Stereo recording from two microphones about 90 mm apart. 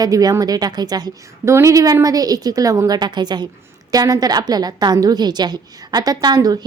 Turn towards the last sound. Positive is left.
turn(degrees=-45)  # may be behind; listen again after turning